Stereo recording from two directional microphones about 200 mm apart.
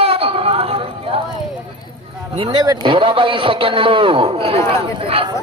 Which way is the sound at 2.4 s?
25° right (ahead or behind).